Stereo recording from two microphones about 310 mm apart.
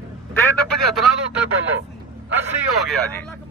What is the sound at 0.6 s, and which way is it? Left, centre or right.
Speech, right.